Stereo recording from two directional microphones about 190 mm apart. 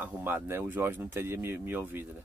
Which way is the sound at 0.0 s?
10° right (ahead or behind).